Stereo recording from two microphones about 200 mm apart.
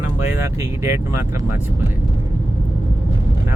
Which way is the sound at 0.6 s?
15° right (ahead or behind).